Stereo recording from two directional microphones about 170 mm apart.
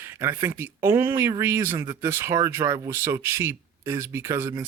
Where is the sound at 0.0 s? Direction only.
15° right (ahead or behind).